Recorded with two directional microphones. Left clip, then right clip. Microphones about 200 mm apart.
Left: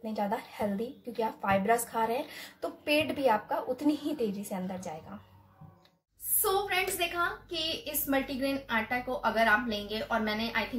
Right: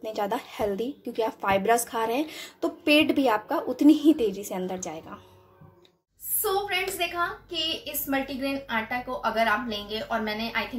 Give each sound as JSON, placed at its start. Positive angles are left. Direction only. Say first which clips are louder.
{"t": 0.0, "sound": "a woman's voice", "louder": "right 4 dB", "side_deg": -50}
{"t": 6.4, "sound": "a woman's voice", "louder": "right 2 dB", "side_deg": 0}